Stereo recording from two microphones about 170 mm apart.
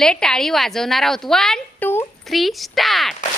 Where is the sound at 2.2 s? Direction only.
Centre (ahead or behind).